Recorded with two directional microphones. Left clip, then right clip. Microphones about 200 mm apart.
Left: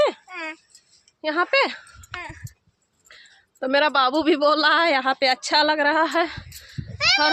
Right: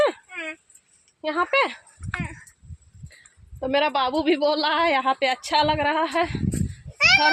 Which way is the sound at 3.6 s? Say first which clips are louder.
Left 3 dB; 10° left (ahead or behind).